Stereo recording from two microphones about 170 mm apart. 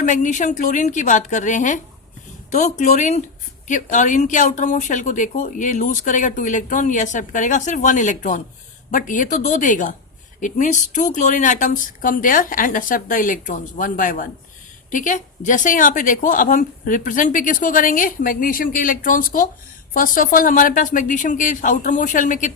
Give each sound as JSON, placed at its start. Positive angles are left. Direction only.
{"t": 0.0, "sound": "speech", "side_deg": 45}